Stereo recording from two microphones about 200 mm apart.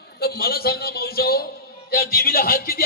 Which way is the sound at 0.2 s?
50° left (ahead or behind).